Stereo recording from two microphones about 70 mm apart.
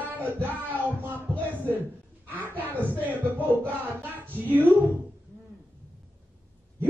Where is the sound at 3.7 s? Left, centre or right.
Right.